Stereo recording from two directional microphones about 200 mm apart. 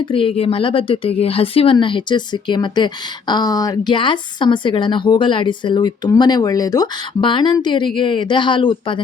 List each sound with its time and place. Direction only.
0.0 s speech: 25° left (ahead or behind)